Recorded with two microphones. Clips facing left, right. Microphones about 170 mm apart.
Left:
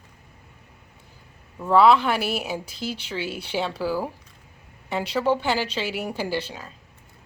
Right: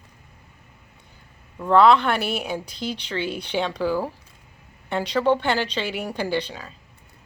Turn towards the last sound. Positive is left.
turn(degrees=5)  # may be behind; listen again after turning